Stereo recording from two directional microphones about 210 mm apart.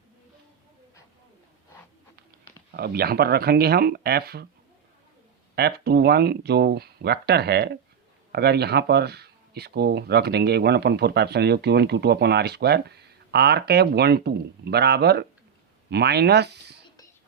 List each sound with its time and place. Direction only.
2.7 s speech: 50° right (ahead or behind)
5.5 s speech: 50° right (ahead or behind)